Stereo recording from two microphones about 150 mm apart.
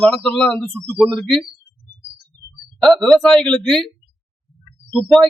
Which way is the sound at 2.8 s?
Centre (ahead or behind).